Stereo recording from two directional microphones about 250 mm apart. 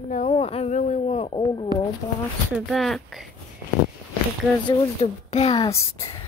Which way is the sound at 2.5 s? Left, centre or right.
Centre.